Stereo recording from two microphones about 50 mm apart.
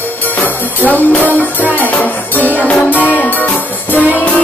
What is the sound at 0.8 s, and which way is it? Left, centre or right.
Music, left.